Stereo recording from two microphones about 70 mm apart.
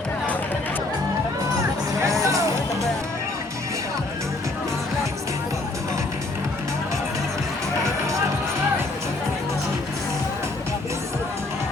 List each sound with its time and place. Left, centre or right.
2.2 s music: right